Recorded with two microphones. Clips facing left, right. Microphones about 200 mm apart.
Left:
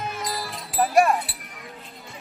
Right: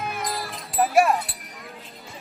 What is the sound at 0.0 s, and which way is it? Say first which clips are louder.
Music: right 1 dB; 55° right (ahead or behind).